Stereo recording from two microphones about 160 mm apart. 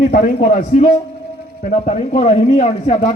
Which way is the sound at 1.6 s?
50° left (ahead or behind).